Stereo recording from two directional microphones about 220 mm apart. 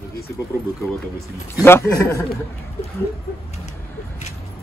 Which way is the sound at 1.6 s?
10° left (ahead or behind).